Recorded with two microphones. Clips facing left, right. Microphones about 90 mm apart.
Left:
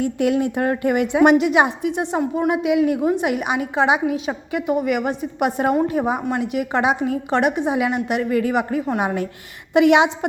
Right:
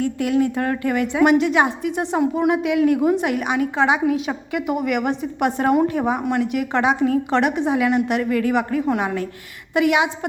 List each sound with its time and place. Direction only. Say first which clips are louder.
0.0 s a woman's voice: even; 20° left (ahead or behind)
1.9 s a woman's voice: right 1 dB; centre (ahead or behind)
9.7 s a woman's voice: left 4 dB; 25° left (ahead or behind)